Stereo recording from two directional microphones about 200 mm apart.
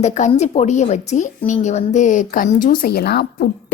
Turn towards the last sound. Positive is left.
turn(degrees=50)  # may be behind; listen again after turning